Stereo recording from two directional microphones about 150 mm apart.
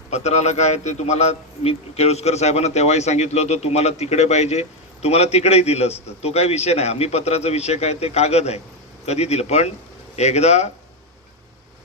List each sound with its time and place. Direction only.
0.1 s a man's voice: 50° left (ahead or behind)